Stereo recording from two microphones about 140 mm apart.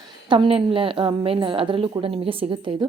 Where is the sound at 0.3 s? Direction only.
40° right (ahead or behind).